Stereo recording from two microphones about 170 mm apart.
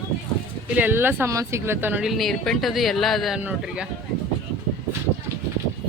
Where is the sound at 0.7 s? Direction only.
10° right (ahead or behind).